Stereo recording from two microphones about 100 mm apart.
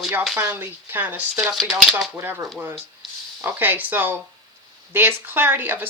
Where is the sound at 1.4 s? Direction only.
5° right (ahead or behind).